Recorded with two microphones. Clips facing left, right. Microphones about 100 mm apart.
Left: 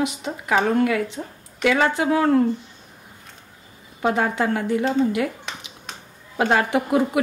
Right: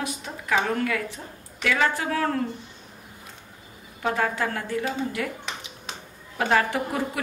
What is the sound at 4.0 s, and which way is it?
Speech, 20° left (ahead or behind).